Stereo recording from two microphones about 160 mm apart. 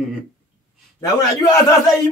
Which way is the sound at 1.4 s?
25° left (ahead or behind).